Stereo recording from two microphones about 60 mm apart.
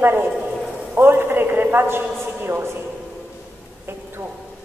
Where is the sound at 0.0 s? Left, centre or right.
Right.